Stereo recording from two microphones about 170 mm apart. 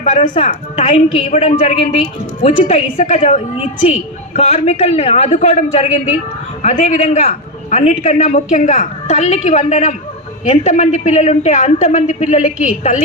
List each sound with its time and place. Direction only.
0.0 s a man's voice: 40° left (ahead or behind)